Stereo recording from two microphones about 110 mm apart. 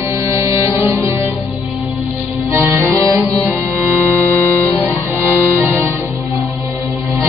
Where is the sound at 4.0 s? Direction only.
20° left (ahead or behind).